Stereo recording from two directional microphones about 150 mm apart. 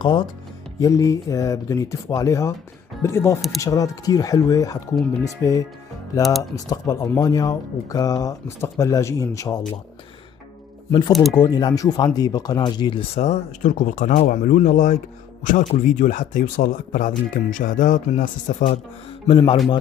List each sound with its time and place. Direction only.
0.0 s a man's voice: 30° left (ahead or behind)
10.9 s speech: 30° left (ahead or behind)
13.1 s speech: 50° left (ahead or behind)
19.2 s a man's voice: 35° left (ahead or behind)